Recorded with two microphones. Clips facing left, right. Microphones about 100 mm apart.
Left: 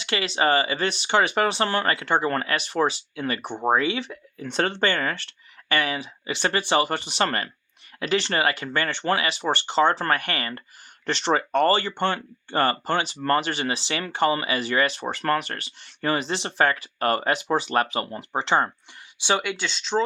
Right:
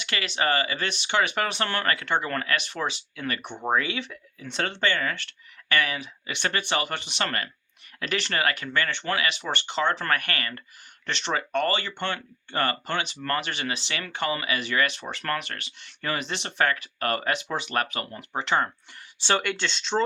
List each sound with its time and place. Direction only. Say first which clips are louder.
0.0 s speech: left 4 dB; 30° left (ahead or behind)
4.4 s speech: left 5 dB; 40° left (ahead or behind)
19.2 s speech: left 1 dB; 10° left (ahead or behind)